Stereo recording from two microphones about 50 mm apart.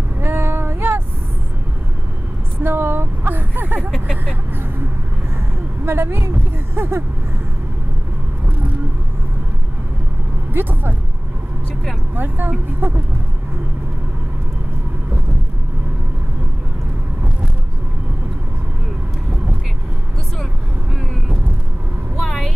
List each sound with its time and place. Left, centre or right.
0.2 s vehicle: right
2.6 s a sound: right
5.9 s speech: right
10.5 s vehicle: right
12.2 s speech: right